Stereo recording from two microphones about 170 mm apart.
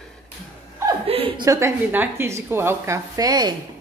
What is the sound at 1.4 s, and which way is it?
A woman's voice, 20° right (ahead or behind).